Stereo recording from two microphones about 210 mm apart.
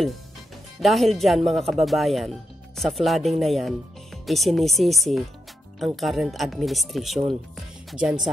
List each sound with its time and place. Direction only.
0.7 s speech: centre (ahead or behind)